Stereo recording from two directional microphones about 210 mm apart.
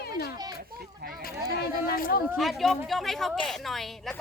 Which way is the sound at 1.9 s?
40° left (ahead or behind).